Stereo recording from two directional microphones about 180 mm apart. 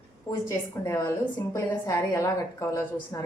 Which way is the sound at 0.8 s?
15° left (ahead or behind).